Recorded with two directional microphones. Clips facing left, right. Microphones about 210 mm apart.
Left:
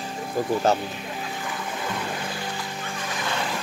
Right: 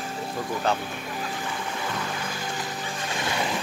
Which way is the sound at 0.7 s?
40° left (ahead or behind).